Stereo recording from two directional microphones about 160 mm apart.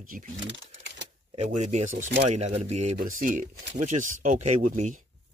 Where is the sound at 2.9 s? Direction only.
55° right (ahead or behind).